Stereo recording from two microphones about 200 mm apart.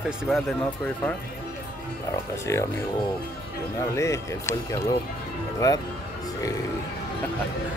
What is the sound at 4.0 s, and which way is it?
Speech, 15° left (ahead or behind).